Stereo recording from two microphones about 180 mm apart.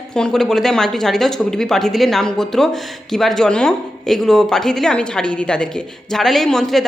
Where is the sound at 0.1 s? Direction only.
5° left (ahead or behind).